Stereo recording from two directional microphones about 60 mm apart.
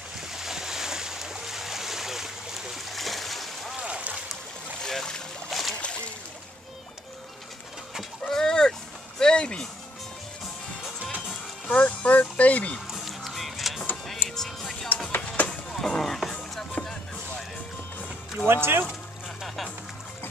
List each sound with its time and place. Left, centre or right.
0.2 s boat: centre
3.8 s a sound: centre
4.8 s boat: centre
5.5 s boat: centre
8.3 s a sound: centre
11.6 s music: left
12.8 s music: centre
15.0 s music: left
15.7 s a sound: centre
16.8 s music: left
18.5 s a sound: right
18.9 s music: centre